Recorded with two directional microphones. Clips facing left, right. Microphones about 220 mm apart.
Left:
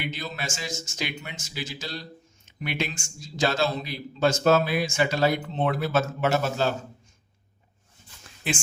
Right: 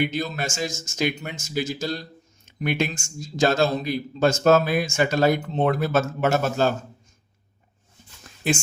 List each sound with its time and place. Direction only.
0.0 s speech: 45° right (ahead or behind)
8.4 s speech: 40° right (ahead or behind)